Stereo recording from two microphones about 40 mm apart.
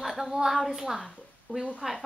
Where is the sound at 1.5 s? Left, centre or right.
Left.